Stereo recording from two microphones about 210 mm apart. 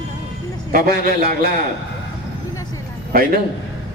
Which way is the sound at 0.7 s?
45° right (ahead or behind).